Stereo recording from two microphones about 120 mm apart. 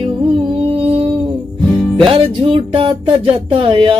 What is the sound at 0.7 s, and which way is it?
Music, 50° right (ahead or behind).